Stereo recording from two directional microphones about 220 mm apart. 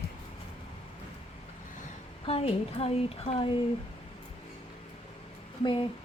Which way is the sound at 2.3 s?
25° left (ahead or behind).